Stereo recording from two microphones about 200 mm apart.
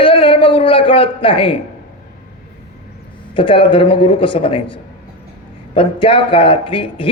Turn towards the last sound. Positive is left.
turn(degrees=25)  # may be behind; listen again after turning